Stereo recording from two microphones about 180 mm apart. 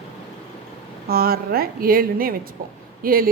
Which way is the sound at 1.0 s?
60° right (ahead or behind).